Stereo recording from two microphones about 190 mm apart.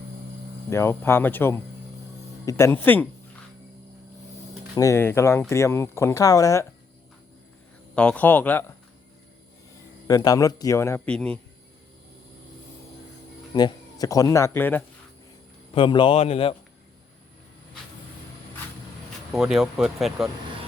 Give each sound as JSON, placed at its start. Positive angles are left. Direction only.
{"t": 0.7, "sound": "speech", "side_deg": 15}
{"t": 4.7, "sound": "speech", "side_deg": 15}
{"t": 7.9, "sound": "speech", "side_deg": 5}
{"t": 10.1, "sound": "speech", "side_deg": 20}
{"t": 13.5, "sound": "speech", "side_deg": 20}
{"t": 15.7, "sound": "a man's voice", "side_deg": 25}
{"t": 19.3, "sound": "speech", "side_deg": 0}